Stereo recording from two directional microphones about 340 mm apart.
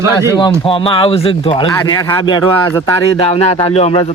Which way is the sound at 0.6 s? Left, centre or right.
Centre.